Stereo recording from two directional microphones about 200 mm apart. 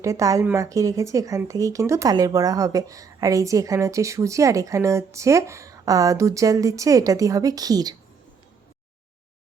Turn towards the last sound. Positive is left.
turn(degrees=-20)  # may be behind; listen again after turning